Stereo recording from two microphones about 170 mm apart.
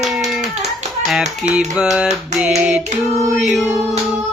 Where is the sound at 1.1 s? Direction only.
Centre (ahead or behind).